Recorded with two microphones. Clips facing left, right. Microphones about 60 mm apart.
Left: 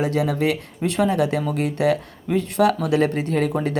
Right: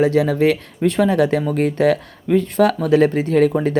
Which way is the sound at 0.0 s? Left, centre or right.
Right.